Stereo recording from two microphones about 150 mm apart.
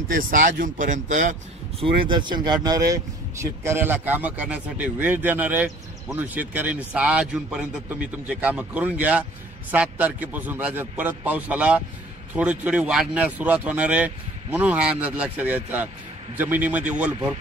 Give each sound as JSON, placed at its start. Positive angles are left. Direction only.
{"t": 0.1, "sound": "speech", "side_deg": -60}
{"t": 1.8, "sound": "speech", "side_deg": -30}